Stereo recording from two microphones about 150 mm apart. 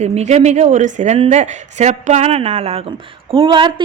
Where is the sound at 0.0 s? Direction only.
50° right (ahead or behind).